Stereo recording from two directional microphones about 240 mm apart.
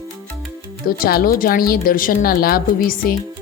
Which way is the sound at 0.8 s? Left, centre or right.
Left.